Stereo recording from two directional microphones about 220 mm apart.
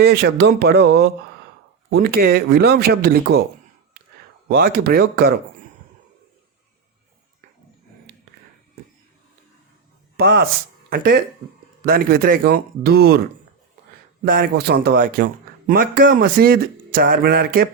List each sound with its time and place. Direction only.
0.0 s speech: 50° right (ahead or behind)
4.4 s speech: 45° right (ahead or behind)
10.2 s speech: 45° right (ahead or behind)
14.3 s a man's voice: 40° right (ahead or behind)